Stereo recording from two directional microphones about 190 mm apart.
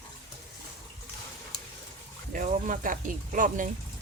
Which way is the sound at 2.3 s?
45° right (ahead or behind).